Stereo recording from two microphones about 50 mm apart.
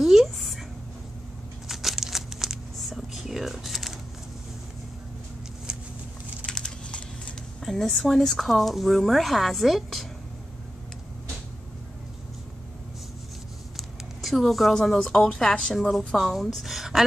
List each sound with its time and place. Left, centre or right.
0.0 s a sound: centre
1.7 s crumpling: centre
5.7 s a sound: centre
6.4 s typing: centre
7.6 s speech: centre
13.7 s a woman's voice: centre